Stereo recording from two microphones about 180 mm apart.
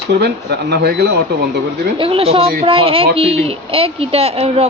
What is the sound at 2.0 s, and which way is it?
A woman's voice, 30° right (ahead or behind).